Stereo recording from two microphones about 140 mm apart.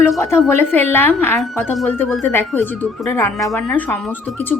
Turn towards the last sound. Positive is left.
turn(degrees=15)  # may be behind; listen again after turning